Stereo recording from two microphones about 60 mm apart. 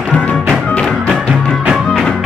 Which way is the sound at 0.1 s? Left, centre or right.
Centre.